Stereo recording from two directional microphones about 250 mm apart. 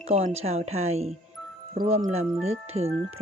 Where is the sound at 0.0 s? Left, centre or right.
Right.